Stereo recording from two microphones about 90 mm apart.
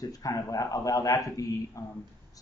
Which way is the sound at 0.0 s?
40° left (ahead or behind).